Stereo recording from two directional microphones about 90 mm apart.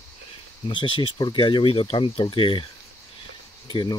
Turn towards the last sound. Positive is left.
turn(degrees=60)  # may be behind; listen again after turning